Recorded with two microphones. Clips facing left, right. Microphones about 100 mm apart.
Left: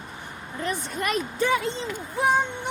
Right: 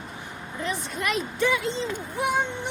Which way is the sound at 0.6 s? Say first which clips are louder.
Left 1 dB; 45° left (ahead or behind).